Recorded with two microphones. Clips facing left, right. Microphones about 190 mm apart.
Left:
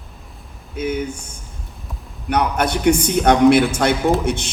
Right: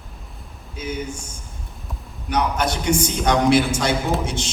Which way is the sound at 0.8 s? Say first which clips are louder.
Left 7 dB; 55° left (ahead or behind).